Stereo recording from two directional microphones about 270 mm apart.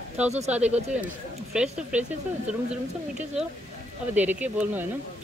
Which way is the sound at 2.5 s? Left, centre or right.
Centre.